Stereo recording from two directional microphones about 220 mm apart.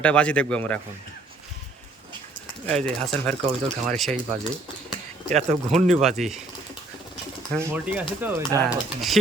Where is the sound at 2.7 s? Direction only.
Centre (ahead or behind).